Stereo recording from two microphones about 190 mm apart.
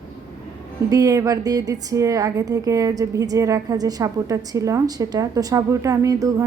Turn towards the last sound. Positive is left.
turn(degrees=-15)  # may be behind; listen again after turning